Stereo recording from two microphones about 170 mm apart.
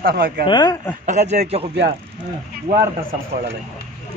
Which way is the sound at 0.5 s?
25° left (ahead or behind).